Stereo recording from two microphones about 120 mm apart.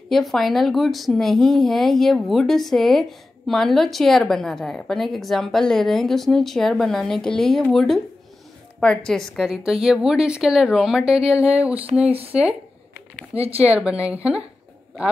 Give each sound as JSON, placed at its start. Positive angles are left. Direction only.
{"t": 0.1, "sound": "speech", "side_deg": 0}
{"t": 12.1, "sound": "speech", "side_deg": -55}
{"t": 13.7, "sound": "speech", "side_deg": -10}